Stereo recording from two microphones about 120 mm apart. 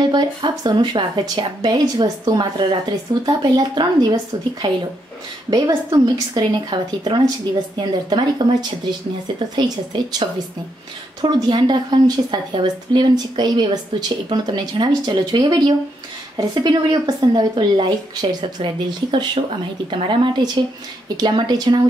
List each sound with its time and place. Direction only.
0.0 s a woman's voice: 35° right (ahead or behind)
11.1 s a woman's voice: 35° right (ahead or behind)